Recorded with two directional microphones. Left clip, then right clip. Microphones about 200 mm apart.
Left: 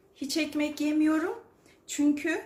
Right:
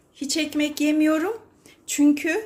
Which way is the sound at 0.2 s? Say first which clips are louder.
Right 5 dB; 35° right (ahead or behind).